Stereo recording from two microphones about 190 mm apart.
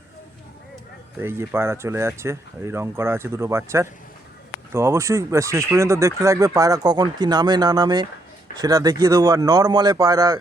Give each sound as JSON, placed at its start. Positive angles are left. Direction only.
{"t": 1.2, "sound": "speech", "side_deg": -10}